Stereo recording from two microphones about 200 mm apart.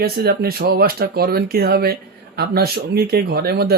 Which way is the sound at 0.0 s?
50° right (ahead or behind).